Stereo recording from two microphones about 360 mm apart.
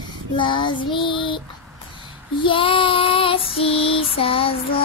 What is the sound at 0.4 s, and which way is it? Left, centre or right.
Female singing, centre.